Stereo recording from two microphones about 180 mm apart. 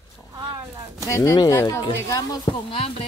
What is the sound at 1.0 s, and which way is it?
Speech, 20° left (ahead or behind).